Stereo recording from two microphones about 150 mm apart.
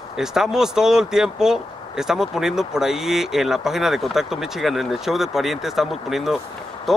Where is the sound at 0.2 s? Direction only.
5° right (ahead or behind).